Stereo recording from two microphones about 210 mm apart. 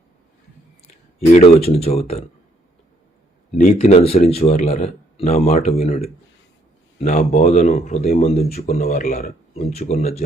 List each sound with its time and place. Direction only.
1.3 s speech: 35° left (ahead or behind)
3.5 s speech: 35° left (ahead or behind)
7.0 s speech: 40° left (ahead or behind)